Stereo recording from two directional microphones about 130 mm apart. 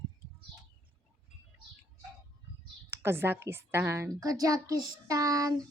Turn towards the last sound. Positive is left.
turn(degrees=-25)  # may be behind; listen again after turning